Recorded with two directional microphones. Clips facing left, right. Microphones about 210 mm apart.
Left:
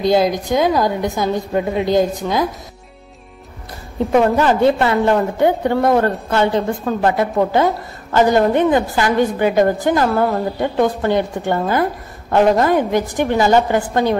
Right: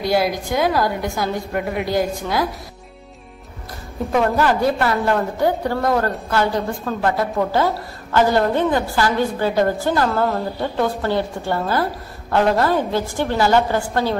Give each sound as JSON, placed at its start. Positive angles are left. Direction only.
{"t": 0.0, "sound": "a woman's voice", "side_deg": 20}
{"t": 4.1, "sound": "a woman's voice", "side_deg": 20}